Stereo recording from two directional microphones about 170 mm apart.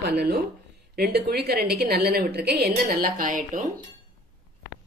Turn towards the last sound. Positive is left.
turn(degrees=-50)  # may be behind; listen again after turning